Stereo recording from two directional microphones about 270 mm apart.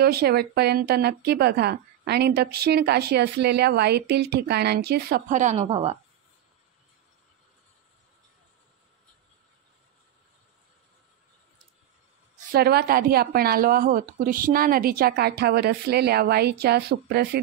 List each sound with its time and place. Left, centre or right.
0.0 s a woman's voice: right
12.4 s a woman's voice: right